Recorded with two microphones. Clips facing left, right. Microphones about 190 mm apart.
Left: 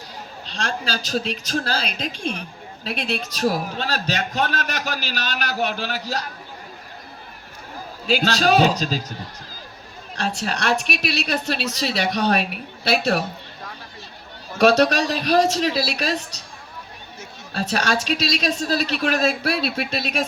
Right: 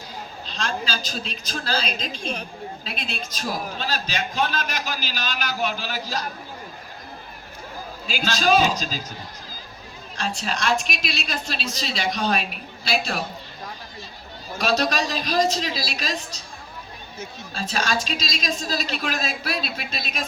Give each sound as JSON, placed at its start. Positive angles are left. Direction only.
{"t": 0.6, "sound": "a woman's voice", "side_deg": 70}
{"t": 8.0, "sound": "a man's voice", "side_deg": 70}
{"t": 10.2, "sound": "a man's voice", "side_deg": 65}
{"t": 14.6, "sound": "a woman's voice", "side_deg": 65}
{"t": 17.5, "sound": "a woman's voice", "side_deg": 65}